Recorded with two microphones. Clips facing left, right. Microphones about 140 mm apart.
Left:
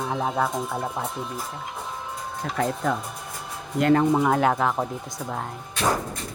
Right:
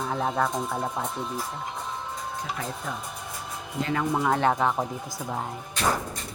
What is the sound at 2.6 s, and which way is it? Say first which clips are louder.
Speech: left 9 dB; 75° left (ahead or behind).